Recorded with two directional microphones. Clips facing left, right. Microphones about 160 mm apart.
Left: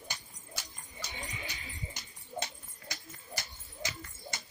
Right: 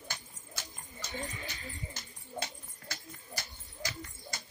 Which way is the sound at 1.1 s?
15° left (ahead or behind).